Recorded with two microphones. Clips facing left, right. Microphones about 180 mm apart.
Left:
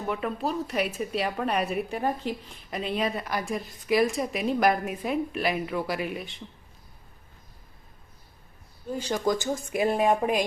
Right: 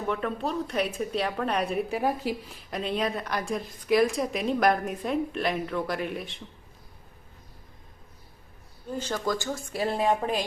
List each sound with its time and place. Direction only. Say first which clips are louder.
0.1 s a woman's voice: left 1 dB; 5° left (ahead or behind)
8.9 s a woman's voice: left 3 dB; 10° left (ahead or behind)